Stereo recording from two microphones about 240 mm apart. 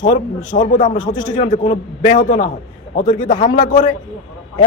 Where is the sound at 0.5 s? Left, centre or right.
Left.